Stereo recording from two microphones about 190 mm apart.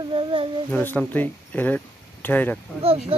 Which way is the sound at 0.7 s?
10° left (ahead or behind).